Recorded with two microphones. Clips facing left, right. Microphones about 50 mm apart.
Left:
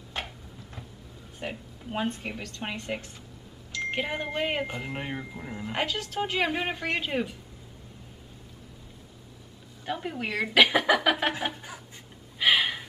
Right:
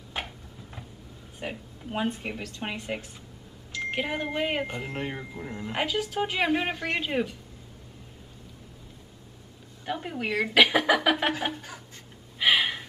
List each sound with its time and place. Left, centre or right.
0.2 s a sound: centre
1.4 s speech: centre
9.8 s speech: centre
12.4 s gasp: centre